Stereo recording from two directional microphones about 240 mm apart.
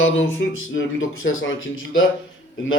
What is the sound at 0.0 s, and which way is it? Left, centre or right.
Speech, left.